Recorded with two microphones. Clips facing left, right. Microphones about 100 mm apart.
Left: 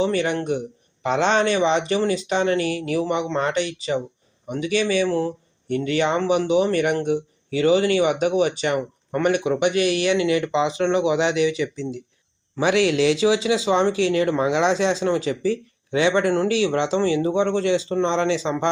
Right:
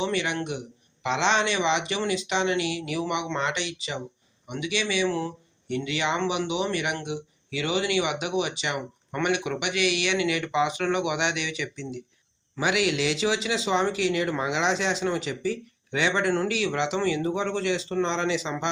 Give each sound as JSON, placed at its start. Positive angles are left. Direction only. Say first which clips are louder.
{"t": 0.0, "sound": "speech", "louder": "left 6 dB", "side_deg": 40}